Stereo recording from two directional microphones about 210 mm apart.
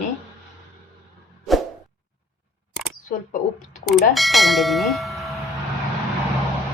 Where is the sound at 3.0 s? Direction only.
40° left (ahead or behind).